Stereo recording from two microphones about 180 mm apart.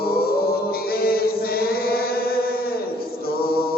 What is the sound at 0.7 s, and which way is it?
Music, 55° left (ahead or behind).